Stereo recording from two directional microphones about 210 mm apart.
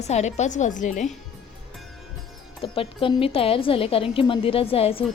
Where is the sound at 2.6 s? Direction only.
25° left (ahead or behind).